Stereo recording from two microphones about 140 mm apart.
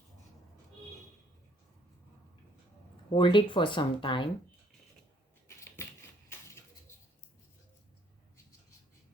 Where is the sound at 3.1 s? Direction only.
35° left (ahead or behind).